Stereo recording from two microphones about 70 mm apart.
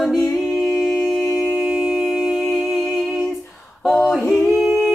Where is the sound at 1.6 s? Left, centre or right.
Centre.